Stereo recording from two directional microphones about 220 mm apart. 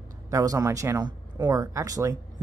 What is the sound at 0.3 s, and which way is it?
Speech, 15° right (ahead or behind).